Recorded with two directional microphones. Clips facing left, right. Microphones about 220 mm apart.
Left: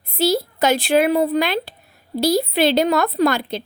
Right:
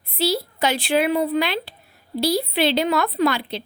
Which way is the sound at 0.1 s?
45° left (ahead or behind).